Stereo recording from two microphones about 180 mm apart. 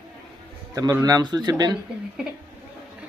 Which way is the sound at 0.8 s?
20° right (ahead or behind).